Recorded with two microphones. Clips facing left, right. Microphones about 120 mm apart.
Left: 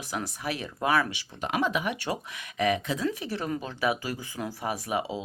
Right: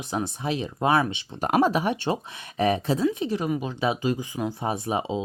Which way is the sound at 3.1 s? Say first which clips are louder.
Right 6 dB; 20° right (ahead or behind).